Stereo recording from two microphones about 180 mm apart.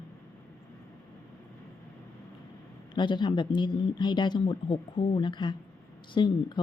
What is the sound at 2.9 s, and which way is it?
Speech, 25° left (ahead or behind).